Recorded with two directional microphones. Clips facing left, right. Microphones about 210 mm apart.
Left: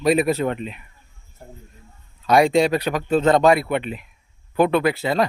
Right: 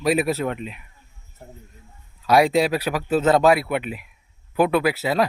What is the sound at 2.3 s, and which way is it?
Speech, 5° right (ahead or behind).